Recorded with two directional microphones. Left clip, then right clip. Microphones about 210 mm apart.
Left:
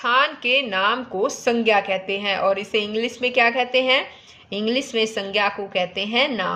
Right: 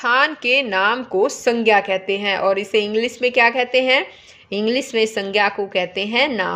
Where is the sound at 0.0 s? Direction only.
40° right (ahead or behind).